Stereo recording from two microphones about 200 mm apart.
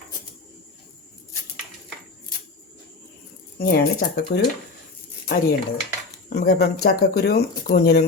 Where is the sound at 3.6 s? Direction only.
50° left (ahead or behind).